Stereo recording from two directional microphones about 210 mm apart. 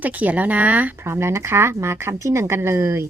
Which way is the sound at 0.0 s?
10° right (ahead or behind).